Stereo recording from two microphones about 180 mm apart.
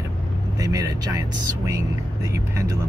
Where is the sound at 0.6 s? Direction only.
20° right (ahead or behind).